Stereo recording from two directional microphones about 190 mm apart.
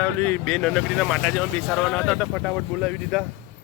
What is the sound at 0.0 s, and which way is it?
Speech, 10° left (ahead or behind).